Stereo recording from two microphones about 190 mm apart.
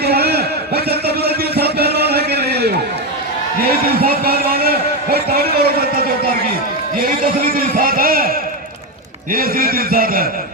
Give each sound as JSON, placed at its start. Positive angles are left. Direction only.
{"t": 0.0, "sound": "a sound", "side_deg": -55}
{"t": 3.6, "sound": "a man's voice", "side_deg": -50}
{"t": 7.3, "sound": "a man's voice", "side_deg": -50}